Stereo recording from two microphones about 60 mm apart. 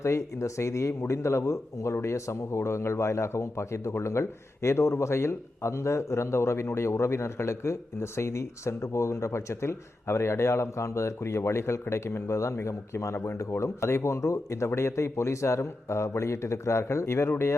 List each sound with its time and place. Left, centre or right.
0.0 s speech: left
13.1 s speech: left